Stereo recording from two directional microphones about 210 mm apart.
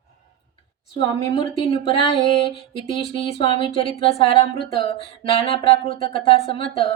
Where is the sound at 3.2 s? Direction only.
25° left (ahead or behind).